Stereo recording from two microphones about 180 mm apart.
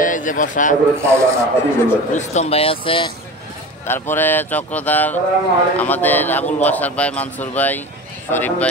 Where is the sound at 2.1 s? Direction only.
40° left (ahead or behind).